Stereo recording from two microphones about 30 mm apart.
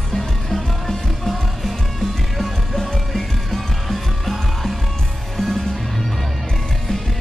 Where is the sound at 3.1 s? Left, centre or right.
Centre.